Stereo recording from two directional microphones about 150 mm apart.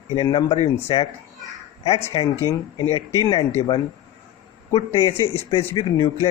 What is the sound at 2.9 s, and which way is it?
Speech, 30° left (ahead or behind).